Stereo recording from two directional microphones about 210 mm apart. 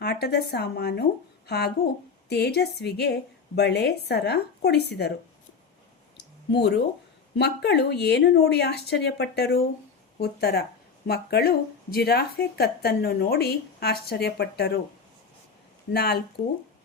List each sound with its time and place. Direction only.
0.0 s speech: 50° left (ahead or behind)
6.1 s a sound: 55° left (ahead or behind)
7.3 s speech: 55° left (ahead or behind)
15.9 s speech: 50° left (ahead or behind)